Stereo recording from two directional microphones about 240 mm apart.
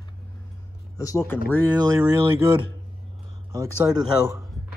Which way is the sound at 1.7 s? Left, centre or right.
Centre.